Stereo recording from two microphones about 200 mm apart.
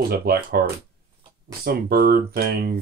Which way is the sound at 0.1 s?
50° right (ahead or behind).